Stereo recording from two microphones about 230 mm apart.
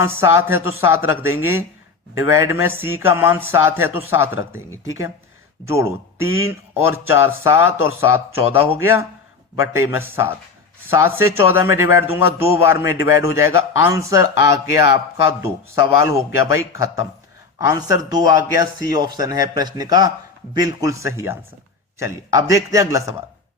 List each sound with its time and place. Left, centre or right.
0.0 s speech: centre
5.6 s speech: centre